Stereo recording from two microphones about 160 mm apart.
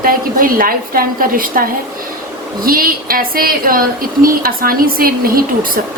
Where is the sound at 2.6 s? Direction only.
65° right (ahead or behind).